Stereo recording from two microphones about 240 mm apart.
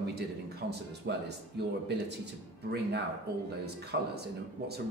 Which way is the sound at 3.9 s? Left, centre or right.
Right.